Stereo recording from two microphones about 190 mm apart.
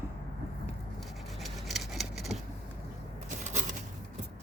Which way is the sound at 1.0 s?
Centre (ahead or behind).